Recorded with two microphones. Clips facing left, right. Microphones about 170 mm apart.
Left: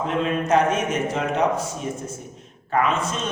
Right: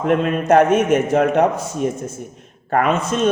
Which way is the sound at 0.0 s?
55° right (ahead or behind).